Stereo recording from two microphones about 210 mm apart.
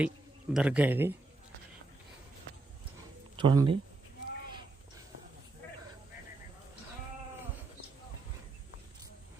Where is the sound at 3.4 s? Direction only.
25° right (ahead or behind).